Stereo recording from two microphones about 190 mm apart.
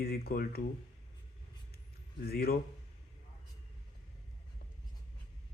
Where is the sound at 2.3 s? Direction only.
55° left (ahead or behind).